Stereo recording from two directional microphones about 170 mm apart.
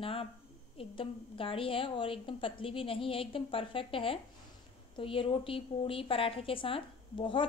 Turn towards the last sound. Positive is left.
turn(degrees=30)  # may be behind; listen again after turning